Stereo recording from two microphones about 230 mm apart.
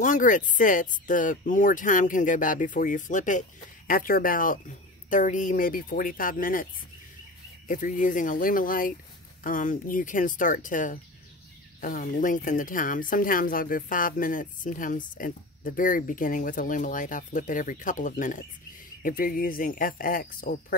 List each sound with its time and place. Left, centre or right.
0.0 s speech: left